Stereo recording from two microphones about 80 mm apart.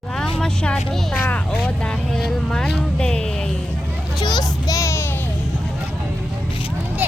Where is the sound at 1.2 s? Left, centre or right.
Left.